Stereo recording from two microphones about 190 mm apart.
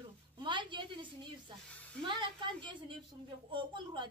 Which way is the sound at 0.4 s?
25° right (ahead or behind).